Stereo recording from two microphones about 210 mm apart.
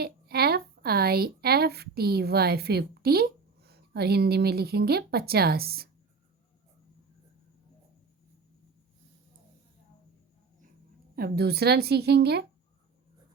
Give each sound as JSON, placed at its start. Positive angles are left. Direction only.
{"t": 0.0, "sound": "a woman's voice", "side_deg": -50}
{"t": 11.1, "sound": "a woman's voice", "side_deg": -50}